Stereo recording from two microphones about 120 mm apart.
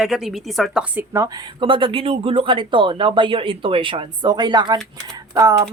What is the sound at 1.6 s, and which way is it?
Speech, 45° right (ahead or behind).